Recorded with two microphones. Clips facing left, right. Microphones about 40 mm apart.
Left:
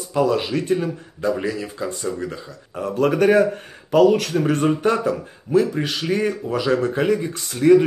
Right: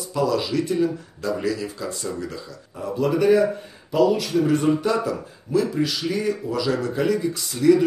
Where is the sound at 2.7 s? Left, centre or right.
Left.